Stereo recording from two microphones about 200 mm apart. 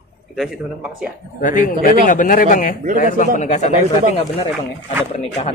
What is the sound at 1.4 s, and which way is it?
A man's voice, 40° left (ahead or behind).